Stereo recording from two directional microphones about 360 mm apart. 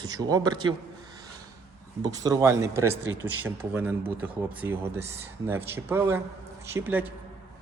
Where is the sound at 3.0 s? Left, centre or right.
Right.